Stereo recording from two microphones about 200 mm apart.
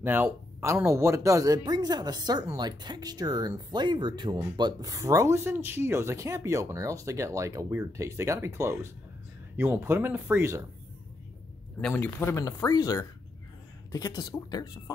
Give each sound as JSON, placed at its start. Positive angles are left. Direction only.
{"t": 0.0, "sound": "speech", "side_deg": -10}
{"t": 11.8, "sound": "speech", "side_deg": 10}